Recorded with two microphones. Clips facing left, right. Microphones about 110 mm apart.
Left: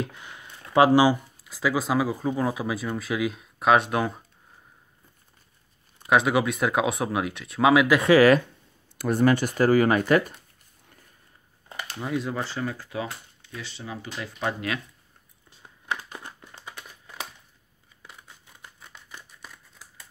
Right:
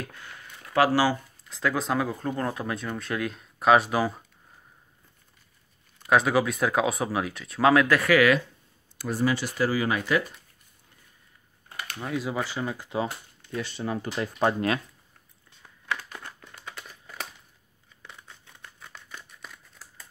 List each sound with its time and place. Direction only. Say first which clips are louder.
0.0 s a sound: left 6 dB; 20° left (ahead or behind)
1.5 s speech: left 2 dB; 5° left (ahead or behind)
6.0 s speech: left 1 dB; centre (ahead or behind)
7.9 s speech: left 3 dB; 20° left (ahead or behind)
8.9 s speech: left 5 dB; 55° left (ahead or behind)
12.0 s speech: left 1 dB; centre (ahead or behind)
13.6 s speech: right 7 dB; 50° right (ahead or behind)
15.6 s crumpling: left 1 dB; 20° left (ahead or behind)
19.4 s scissors: right 1 dB; centre (ahead or behind)